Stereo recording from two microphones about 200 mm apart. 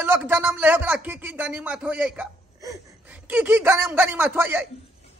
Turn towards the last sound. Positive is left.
turn(degrees=-10)  # may be behind; listen again after turning